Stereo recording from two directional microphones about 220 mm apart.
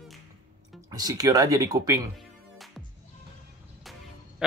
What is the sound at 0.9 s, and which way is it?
Speech, 15° right (ahead or behind).